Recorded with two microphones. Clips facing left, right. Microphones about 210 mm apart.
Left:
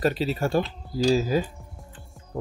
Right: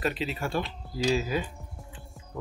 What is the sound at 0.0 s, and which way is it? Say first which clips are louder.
Speech: left 6 dB; 40° left (ahead or behind).